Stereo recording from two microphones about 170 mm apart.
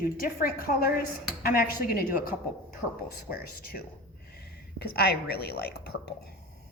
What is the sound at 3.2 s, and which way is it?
Speech, 60° left (ahead or behind).